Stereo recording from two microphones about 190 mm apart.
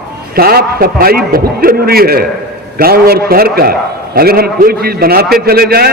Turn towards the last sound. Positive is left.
turn(degrees=-55)  # may be behind; listen again after turning